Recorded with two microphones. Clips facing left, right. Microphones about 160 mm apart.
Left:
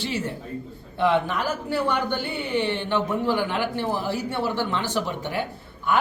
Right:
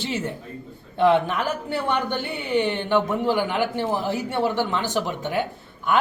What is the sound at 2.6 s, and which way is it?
Speech, 15° right (ahead or behind).